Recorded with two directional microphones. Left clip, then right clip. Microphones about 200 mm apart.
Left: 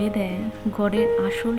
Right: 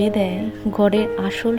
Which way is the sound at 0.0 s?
20° right (ahead or behind).